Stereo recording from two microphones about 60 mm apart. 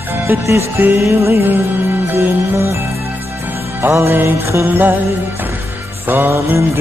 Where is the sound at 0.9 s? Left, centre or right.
Right.